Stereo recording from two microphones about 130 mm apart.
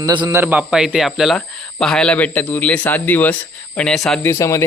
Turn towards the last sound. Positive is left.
turn(degrees=25)  # may be behind; listen again after turning